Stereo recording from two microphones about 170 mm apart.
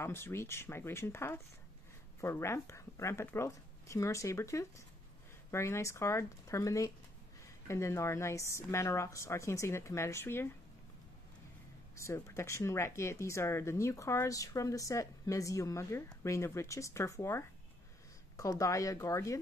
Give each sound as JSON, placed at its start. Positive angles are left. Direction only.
{"t": 0.0, "sound": "speech", "side_deg": 15}
{"t": 12.0, "sound": "speech", "side_deg": 15}